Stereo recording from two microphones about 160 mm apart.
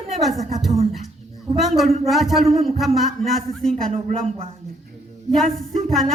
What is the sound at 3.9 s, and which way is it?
Speech, 40° right (ahead or behind).